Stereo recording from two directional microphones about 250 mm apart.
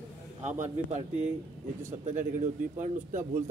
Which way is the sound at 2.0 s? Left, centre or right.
Right.